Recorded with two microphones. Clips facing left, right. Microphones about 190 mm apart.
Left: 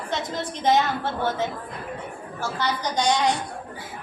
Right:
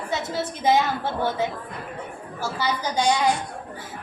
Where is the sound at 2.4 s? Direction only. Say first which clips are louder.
Right 1 dB; 10° right (ahead or behind).